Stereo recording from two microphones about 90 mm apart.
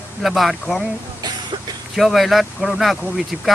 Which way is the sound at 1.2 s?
55° right (ahead or behind).